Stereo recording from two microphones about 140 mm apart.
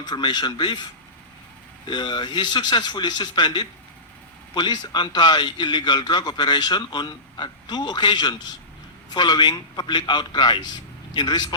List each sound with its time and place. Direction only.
0.0 s a man's voice: 30° left (ahead or behind)
1.9 s a man's voice: 30° left (ahead or behind)